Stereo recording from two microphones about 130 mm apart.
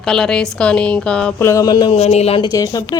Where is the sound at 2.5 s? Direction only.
30° left (ahead or behind).